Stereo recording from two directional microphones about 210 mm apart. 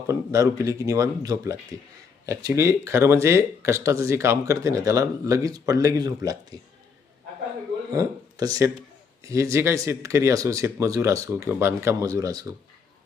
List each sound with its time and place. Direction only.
0.1 s speech: 15° right (ahead or behind)
7.9 s speech: 15° right (ahead or behind)